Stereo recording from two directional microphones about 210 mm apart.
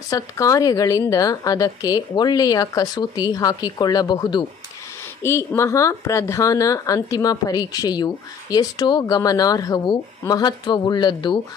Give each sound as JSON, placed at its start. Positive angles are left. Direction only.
{"t": 0.1, "sound": "a woman's voice", "side_deg": 15}